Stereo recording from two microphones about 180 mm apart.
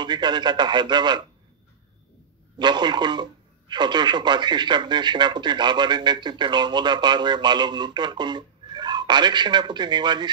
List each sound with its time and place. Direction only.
0.0 s speech: 25° right (ahead or behind)
2.5 s speech: 25° right (ahead or behind)